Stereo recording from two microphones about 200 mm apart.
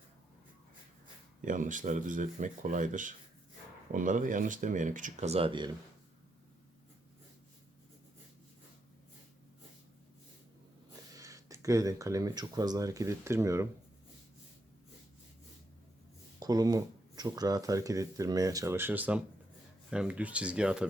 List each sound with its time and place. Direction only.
1.4 s speech: 40° right (ahead or behind); by 5.7 s 25° right (ahead or behind)
11.1 s speech: 15° right (ahead or behind)
16.4 s speech: 20° right (ahead or behind)